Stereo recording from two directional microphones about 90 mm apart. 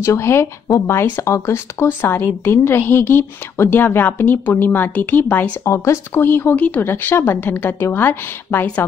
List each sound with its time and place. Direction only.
0.0 s speech: 30° left (ahead or behind)